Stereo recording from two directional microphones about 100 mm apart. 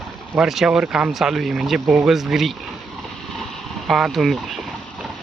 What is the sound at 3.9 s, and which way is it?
Speech, 5° right (ahead or behind).